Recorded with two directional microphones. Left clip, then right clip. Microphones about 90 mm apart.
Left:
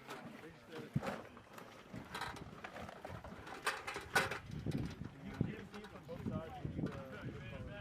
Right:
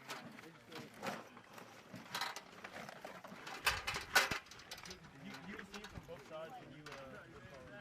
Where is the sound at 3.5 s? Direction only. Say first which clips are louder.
Right 3 dB; 35° right (ahead or behind).